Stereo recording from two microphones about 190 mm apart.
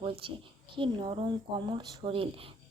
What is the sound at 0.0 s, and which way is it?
A woman's voice, 25° right (ahead or behind).